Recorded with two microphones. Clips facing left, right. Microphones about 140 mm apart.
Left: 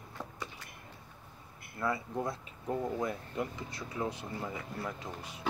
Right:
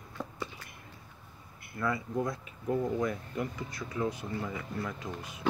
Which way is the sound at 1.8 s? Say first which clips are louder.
Right 2 dB; 30° left (ahead or behind).